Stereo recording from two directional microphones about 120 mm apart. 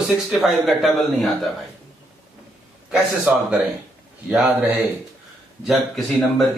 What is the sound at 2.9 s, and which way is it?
A man's voice, 10° right (ahead or behind).